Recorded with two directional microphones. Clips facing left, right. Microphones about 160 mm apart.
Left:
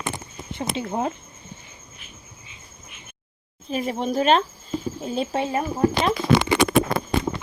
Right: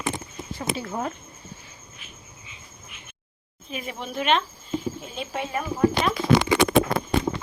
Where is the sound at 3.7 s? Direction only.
35° left (ahead or behind).